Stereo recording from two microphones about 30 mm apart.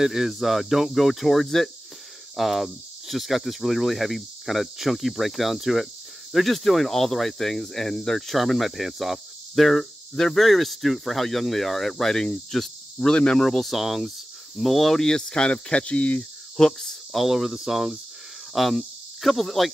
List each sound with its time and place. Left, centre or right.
0.0 s speech: centre
2.3 s speech: centre
8.4 s speech: centre
12.0 s speech: centre
13.4 s speech: centre
13.7 s speech: centre
15.0 s speech: centre
15.5 s speech: left
16.5 s speech: centre
17.1 s speech: centre
17.5 s speech: centre
18.5 s speech: centre